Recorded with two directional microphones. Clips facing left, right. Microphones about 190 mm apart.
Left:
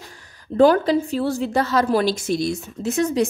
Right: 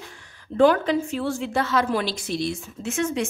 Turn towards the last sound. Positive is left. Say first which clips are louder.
# left 5 dB
turn(degrees=35)  # may be behind; listen again after turning